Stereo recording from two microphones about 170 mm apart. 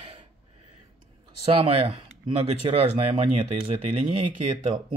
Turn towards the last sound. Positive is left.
turn(degrees=-35)  # may be behind; listen again after turning